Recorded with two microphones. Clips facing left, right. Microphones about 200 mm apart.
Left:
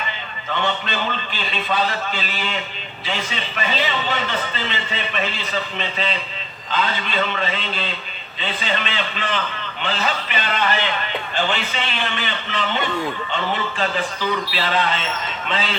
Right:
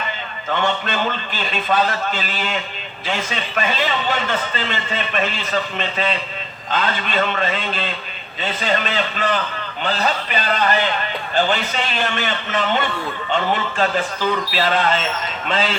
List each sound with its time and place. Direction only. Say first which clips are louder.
0.5 s a man's voice: right 3 dB; 50° right (ahead or behind)
4.1 s a man's voice: right 2 dB; 45° right (ahead or behind)